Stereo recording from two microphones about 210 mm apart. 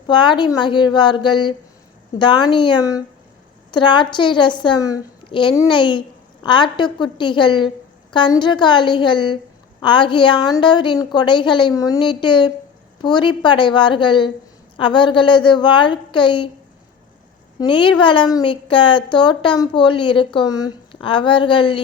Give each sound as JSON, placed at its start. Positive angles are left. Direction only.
{"t": 0.1, "sound": "a woman's voice", "side_deg": 20}
{"t": 17.6, "sound": "a woman's voice", "side_deg": 25}